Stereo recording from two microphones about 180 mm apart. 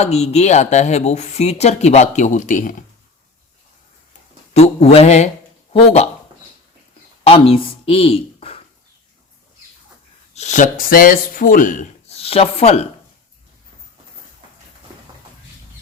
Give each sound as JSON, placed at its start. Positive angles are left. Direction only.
{"t": 0.0, "sound": "speech", "side_deg": 35}
{"t": 4.5, "sound": "speech", "side_deg": 35}
{"t": 7.3, "sound": "speech", "side_deg": 30}
{"t": 10.3, "sound": "speech", "side_deg": 40}